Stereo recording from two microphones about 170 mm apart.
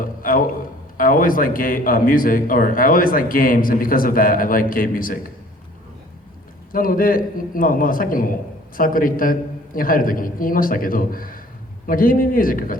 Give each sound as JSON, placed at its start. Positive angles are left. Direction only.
{"t": 0.0, "sound": "a man's voice", "side_deg": 55}
{"t": 6.7, "sound": "a man's voice", "side_deg": 55}